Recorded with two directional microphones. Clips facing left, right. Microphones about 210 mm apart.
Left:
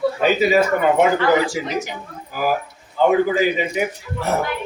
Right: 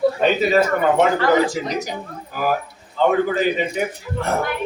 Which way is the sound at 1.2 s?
40° right (ahead or behind).